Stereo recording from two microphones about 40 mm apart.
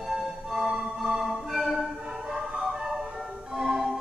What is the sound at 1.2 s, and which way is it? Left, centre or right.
Music, centre.